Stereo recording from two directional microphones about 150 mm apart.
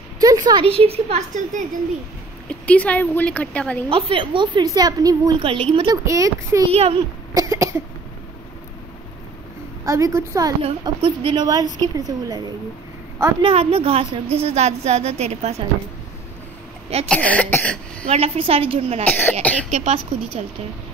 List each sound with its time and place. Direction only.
0.2 s a sound: 25° right (ahead or behind)
0.7 s a woman's voice: 40° right (ahead or behind)
2.4 s speech: 10° left (ahead or behind)
3.9 s a woman's voice: 35° right (ahead or behind)
5.5 s a woman's voice: 35° right (ahead or behind)
6.0 s a woman's voice: 20° right (ahead or behind)
6.7 s a woman's voice: 40° right (ahead or behind)
7.3 s cough: 20° right (ahead or behind)
9.8 s a woman's voice: 20° right (ahead or behind)
10.6 s a woman's voice: 40° right (ahead or behind)
13.4 s a woman's voice: 40° right (ahead or behind)
17.1 s speech: 10° left (ahead or behind)
18.1 s a woman's voice: 40° right (ahead or behind)